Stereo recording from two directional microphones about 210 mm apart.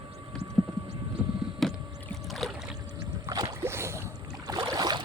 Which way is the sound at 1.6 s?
Centre (ahead or behind).